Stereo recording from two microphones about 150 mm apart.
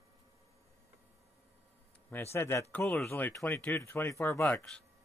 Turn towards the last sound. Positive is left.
turn(degrees=15)  # may be behind; listen again after turning